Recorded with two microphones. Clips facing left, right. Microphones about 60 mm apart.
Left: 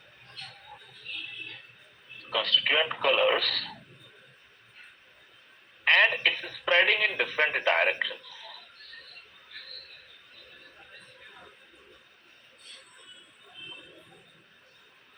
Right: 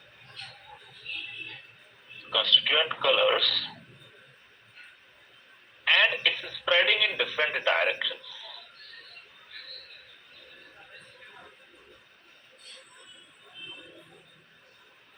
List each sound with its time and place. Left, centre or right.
2.3 s speech: left
5.8 s telephone: left
6.2 s a sound: left